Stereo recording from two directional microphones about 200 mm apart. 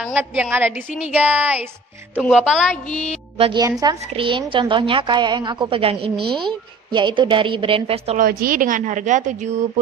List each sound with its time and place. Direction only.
0.0 s a woman's voice: 10° right (ahead or behind)
3.3 s a woman's voice: 30° right (ahead or behind)
3.6 s a woman's voice: 20° right (ahead or behind)
8.2 s a woman's voice: 45° right (ahead or behind)